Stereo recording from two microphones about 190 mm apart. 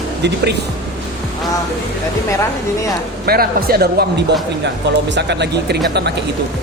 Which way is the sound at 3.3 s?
55° right (ahead or behind).